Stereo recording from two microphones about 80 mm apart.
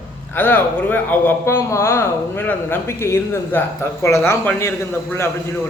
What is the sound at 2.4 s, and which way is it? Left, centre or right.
Speech, left.